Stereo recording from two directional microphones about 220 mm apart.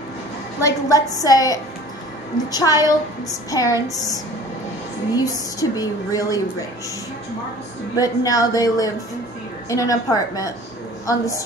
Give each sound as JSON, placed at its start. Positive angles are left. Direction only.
{"t": 0.6, "sound": "a woman's voice", "side_deg": 15}
{"t": 8.0, "sound": "a woman's voice", "side_deg": 15}